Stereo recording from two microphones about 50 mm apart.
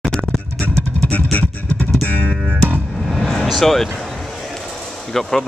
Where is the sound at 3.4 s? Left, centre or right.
Centre.